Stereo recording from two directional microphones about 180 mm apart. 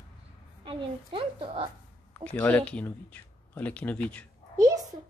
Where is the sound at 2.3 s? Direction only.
10° left (ahead or behind).